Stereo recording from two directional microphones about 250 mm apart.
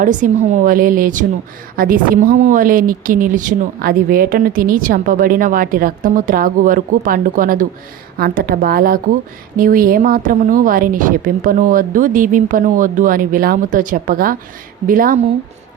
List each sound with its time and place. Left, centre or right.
0.0 s speech: right